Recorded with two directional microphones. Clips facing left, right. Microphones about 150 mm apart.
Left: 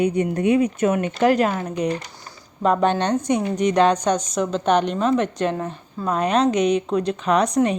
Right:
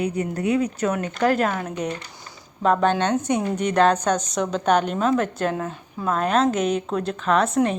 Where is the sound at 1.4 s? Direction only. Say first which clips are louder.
Left 3 dB; 5° left (ahead or behind).